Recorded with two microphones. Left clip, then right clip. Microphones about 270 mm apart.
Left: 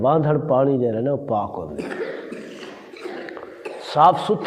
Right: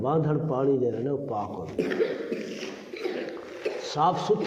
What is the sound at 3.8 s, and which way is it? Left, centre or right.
Speech, left.